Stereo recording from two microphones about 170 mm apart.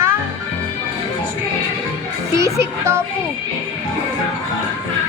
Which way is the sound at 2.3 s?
15° right (ahead or behind).